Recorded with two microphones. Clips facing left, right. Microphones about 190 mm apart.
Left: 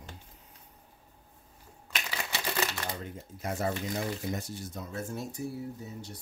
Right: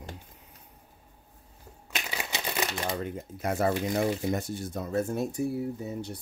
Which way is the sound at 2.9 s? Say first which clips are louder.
Right 7 dB; 65° right (ahead or behind).